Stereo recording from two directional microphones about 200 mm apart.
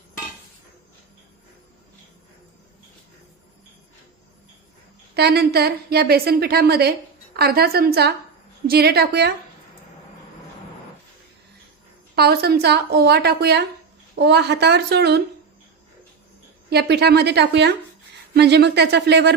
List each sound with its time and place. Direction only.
5.1 s a woman's voice: 55° right (ahead or behind)
12.1 s a woman's voice: 50° right (ahead or behind)
16.6 s a woman's voice: 55° right (ahead or behind)